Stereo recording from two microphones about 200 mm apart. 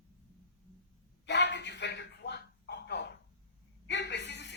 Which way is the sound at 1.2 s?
60° left (ahead or behind).